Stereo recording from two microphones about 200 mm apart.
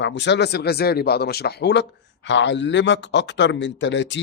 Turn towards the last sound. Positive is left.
turn(degrees=65)  # may be behind; listen again after turning